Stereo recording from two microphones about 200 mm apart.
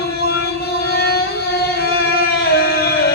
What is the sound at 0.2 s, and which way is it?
Music, 50° left (ahead or behind).